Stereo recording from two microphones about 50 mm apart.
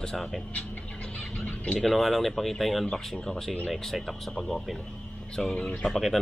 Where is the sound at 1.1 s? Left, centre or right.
Left.